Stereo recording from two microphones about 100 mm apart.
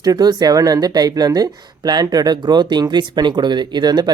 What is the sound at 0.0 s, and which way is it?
Speech, 40° right (ahead or behind).